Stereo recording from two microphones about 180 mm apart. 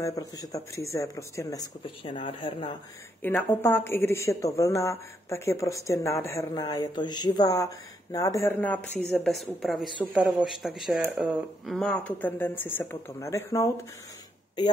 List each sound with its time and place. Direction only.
0.0 s speech: 20° left (ahead or behind)
2.1 s speech: 35° left (ahead or behind)
3.2 s speech: 10° left (ahead or behind)